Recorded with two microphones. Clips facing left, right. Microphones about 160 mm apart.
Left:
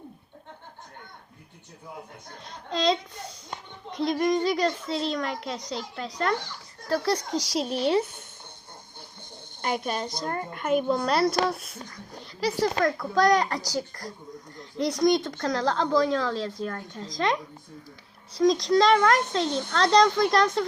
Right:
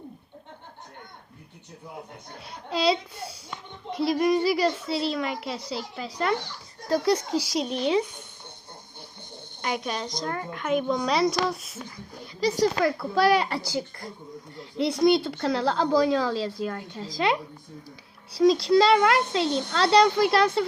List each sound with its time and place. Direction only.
2.5 s a woman's voice: 10° right (ahead or behind)
6.8 s speech: 15° right (ahead or behind)
7.3 s a woman's voice: 5° right (ahead or behind)
10.1 s a woman's voice: 5° left (ahead or behind)
12.2 s a sound: 20° right (ahead or behind)
12.8 s a woman's voice: 5° right (ahead or behind)